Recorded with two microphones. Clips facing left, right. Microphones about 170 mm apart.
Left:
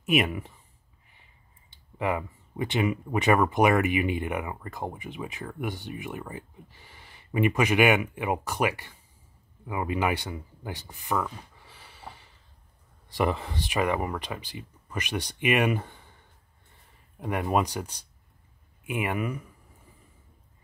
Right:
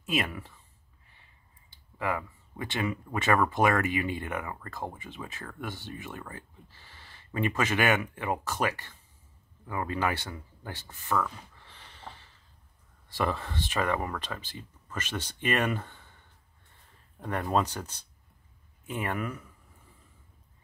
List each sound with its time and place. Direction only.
0.0 s speech: 20° left (ahead or behind)
1.7 s speech: 20° left (ahead or behind)
17.2 s speech: 10° left (ahead or behind)